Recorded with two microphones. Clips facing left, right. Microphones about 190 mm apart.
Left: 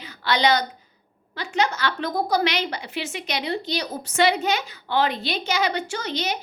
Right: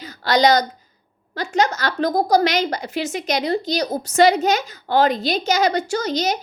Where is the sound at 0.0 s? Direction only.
40° right (ahead or behind).